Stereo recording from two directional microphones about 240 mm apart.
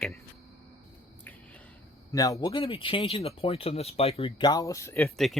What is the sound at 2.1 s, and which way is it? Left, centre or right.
Speech, centre.